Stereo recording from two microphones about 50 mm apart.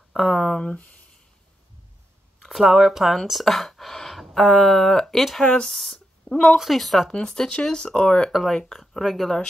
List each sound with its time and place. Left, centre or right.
0.1 s speech: centre
0.7 s speech: left
2.4 s speech: centre
5.6 s a sound: centre
6.5 s speech: centre
7.1 s speech: centre
8.3 s speech: centre
8.5 s speech: centre